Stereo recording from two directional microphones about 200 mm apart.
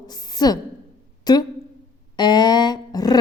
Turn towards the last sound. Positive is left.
turn(degrees=20)  # may be behind; listen again after turning